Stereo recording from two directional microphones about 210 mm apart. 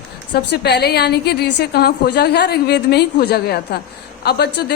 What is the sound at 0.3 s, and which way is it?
A woman's voice, 50° left (ahead or behind).